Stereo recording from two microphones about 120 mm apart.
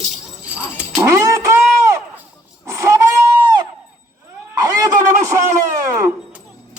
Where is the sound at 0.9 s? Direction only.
25° right (ahead or behind).